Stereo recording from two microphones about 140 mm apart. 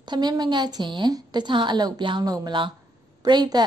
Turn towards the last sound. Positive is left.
turn(degrees=-30)  # may be behind; listen again after turning